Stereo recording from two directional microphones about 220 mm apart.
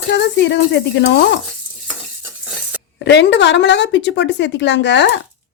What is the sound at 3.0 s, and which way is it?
Speech, 50° left (ahead or behind).